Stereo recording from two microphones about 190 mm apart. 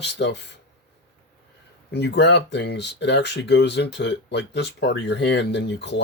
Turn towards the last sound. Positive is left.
turn(degrees=65)  # may be behind; listen again after turning